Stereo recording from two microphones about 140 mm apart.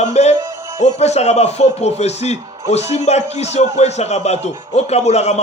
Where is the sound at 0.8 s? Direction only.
50° left (ahead or behind).